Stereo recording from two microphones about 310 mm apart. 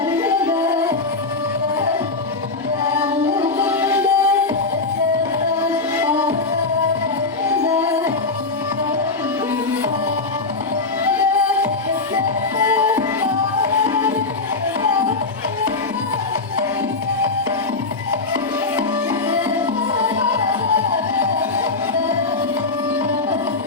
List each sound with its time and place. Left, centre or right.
0.2 s music: centre
3.2 s music: centre
3.6 s music: centre
5.6 s music: centre
11.1 s music: centre
13.8 s tabla: centre
19.3 s music: centre